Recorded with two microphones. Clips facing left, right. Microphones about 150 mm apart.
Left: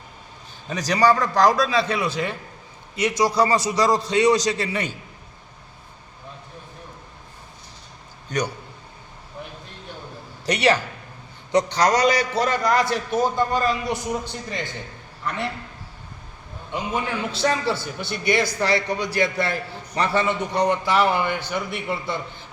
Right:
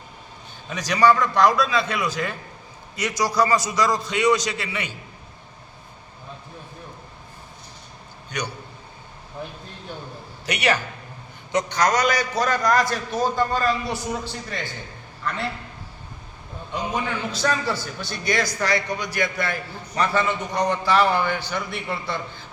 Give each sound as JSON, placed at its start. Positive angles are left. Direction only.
{"t": 0.7, "sound": "a man's voice", "side_deg": 35}
{"t": 10.4, "sound": "a man's voice", "side_deg": 35}
{"t": 17.3, "sound": "a man's voice", "side_deg": 25}